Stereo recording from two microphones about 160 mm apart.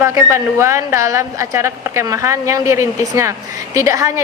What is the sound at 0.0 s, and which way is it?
A woman's voice, 15° right (ahead or behind).